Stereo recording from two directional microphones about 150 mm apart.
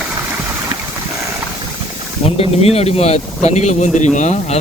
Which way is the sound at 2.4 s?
40° left (ahead or behind).